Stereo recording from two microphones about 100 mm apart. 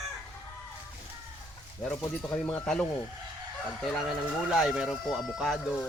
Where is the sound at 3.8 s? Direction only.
Centre (ahead or behind).